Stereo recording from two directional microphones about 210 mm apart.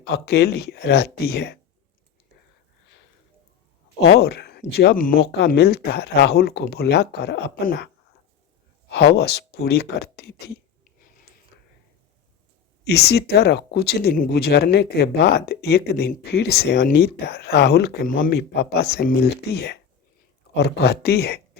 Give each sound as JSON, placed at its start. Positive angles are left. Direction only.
{"t": 0.0, "sound": "speech", "side_deg": 50}
{"t": 4.0, "sound": "speech", "side_deg": 50}
{"t": 8.9, "sound": "speech", "side_deg": 50}
{"t": 12.8, "sound": "speech", "side_deg": 50}